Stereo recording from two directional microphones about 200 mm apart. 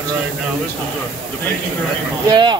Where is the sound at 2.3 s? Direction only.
20° right (ahead or behind).